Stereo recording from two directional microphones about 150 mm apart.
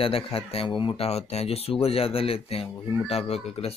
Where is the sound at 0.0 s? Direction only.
40° left (ahead or behind).